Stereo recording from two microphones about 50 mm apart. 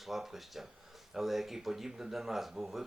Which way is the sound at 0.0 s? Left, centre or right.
Centre.